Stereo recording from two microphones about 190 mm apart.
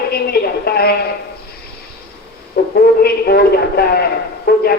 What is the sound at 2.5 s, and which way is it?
A man's voice, 50° left (ahead or behind).